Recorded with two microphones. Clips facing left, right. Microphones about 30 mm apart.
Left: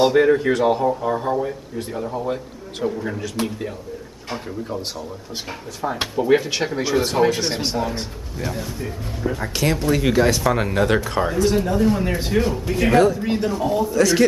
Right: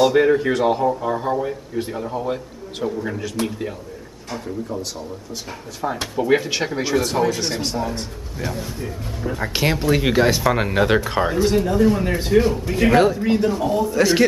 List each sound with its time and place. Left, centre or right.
0.1 s a man's voice: centre
5.8 s a man's voice: centre
7.1 s speech: centre
8.6 s a man's voice: centre
9.5 s speech: right
11.6 s a man's voice: centre
12.9 s a man's voice: centre
13.2 s a man's voice: centre
13.9 s a man's voice: right